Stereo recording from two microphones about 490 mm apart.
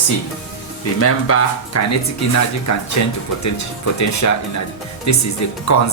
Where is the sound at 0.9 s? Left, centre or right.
Left.